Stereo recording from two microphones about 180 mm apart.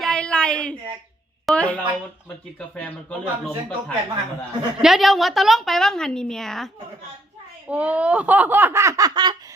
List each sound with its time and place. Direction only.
0.0 s a sound: 5° left (ahead or behind)
1.5 s a woman's voice: 5° left (ahead or behind)
7.7 s speech: 5° right (ahead or behind); by 9.3 s 20° right (ahead or behind)